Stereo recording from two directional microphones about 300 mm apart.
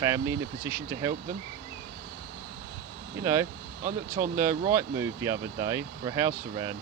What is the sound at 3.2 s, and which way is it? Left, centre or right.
Speech, centre.